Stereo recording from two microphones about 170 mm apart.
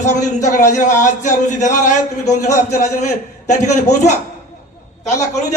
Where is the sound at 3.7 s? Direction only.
45° left (ahead or behind).